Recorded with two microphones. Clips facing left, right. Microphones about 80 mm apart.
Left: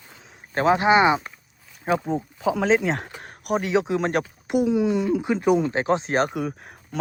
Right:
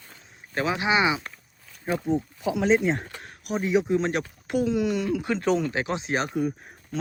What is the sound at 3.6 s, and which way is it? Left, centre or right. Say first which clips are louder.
Speech: right 2 dB; left.